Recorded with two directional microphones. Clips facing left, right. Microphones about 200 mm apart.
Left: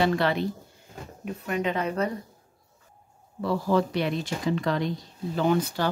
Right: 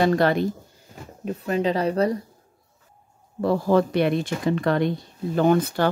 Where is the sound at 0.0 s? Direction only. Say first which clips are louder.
Right 4 dB; 45° right (ahead or behind).